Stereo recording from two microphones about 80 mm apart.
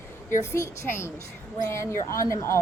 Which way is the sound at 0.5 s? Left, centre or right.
Left.